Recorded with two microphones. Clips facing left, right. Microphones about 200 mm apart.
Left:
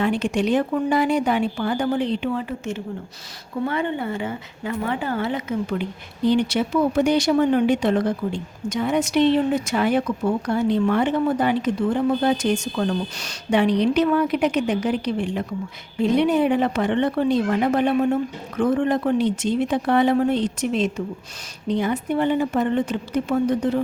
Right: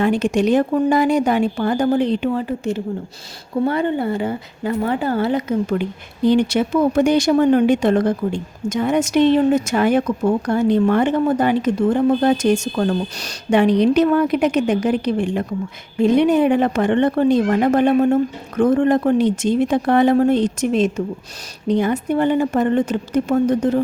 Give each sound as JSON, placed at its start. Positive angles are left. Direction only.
{"t": 0.0, "sound": "a woman's voice", "side_deg": -45}